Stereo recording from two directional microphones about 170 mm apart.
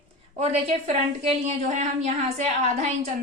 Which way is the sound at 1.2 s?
45° right (ahead or behind).